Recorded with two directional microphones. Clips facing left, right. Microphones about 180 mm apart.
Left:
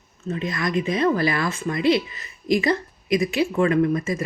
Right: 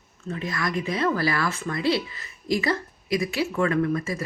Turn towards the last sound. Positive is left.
turn(degrees=20)  # may be behind; listen again after turning